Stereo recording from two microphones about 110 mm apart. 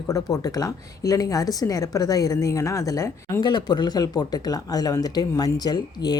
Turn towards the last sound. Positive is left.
turn(degrees=40)  # may be behind; listen again after turning